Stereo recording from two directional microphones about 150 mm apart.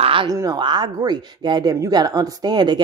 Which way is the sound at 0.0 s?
35° right (ahead or behind).